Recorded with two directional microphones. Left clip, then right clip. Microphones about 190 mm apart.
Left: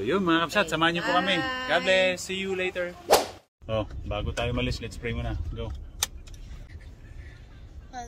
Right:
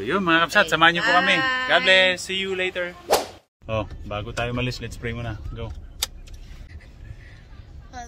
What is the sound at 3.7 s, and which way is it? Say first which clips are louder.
Speech: right 2 dB; 15° right (ahead or behind).